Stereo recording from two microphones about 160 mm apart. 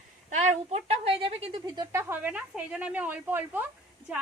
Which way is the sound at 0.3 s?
45° right (ahead or behind).